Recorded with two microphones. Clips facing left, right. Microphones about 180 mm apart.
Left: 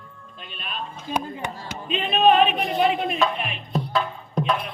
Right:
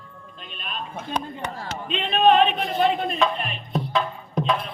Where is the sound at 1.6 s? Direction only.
5° left (ahead or behind).